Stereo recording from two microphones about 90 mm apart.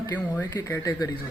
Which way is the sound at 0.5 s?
35° left (ahead or behind).